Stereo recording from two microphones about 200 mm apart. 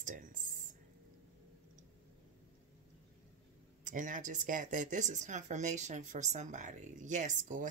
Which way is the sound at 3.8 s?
40° right (ahead or behind).